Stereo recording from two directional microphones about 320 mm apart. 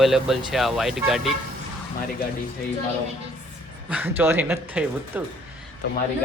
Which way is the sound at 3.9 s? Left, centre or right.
Centre.